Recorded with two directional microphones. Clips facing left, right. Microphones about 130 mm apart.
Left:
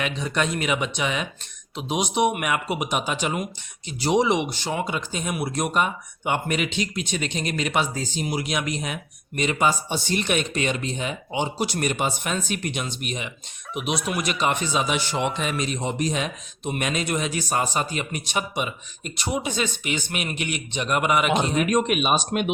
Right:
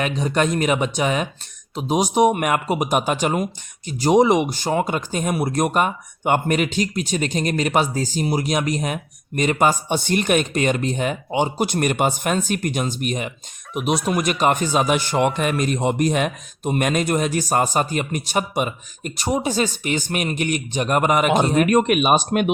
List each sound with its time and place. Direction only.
0.0 s speech: 45° right (ahead or behind)